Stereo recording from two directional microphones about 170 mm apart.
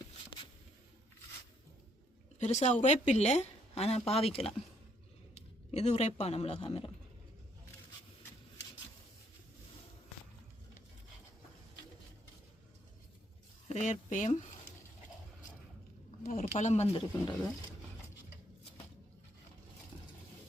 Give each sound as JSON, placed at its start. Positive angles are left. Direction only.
{"t": 2.4, "sound": "a woman's voice", "side_deg": 45}
{"t": 5.7, "sound": "speech", "side_deg": 40}
{"t": 13.7, "sound": "speech", "side_deg": 40}
{"t": 16.4, "sound": "speech", "side_deg": 40}